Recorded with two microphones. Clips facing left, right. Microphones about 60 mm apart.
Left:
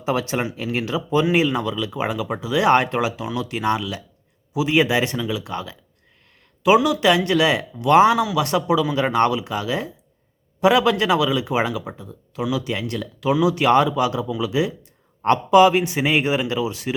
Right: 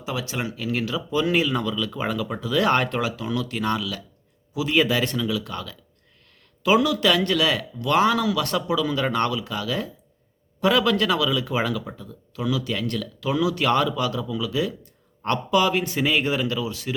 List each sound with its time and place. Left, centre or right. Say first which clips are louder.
0.0 s speech: left 6 dB; left
6.8 s speech: left 3 dB; centre